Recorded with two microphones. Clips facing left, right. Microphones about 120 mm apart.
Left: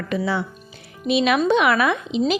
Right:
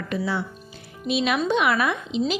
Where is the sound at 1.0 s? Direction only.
75° left (ahead or behind).